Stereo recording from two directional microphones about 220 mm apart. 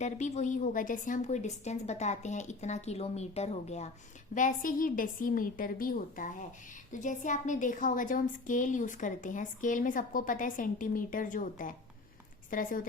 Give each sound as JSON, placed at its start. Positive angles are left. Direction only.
{"t": 0.0, "sound": "a woman's voice", "side_deg": 30}